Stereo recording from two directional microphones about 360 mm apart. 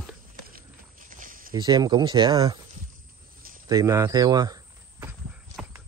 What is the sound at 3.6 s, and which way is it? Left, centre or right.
Speech, centre.